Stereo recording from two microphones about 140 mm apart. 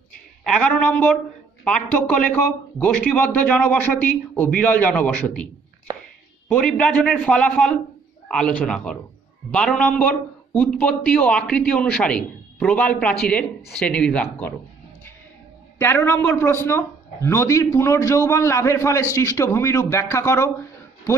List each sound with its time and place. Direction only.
0.5 s a man's voice: 5° left (ahead or behind)
6.5 s a man's voice: 5° left (ahead or behind)
15.8 s a man's voice: 15° left (ahead or behind)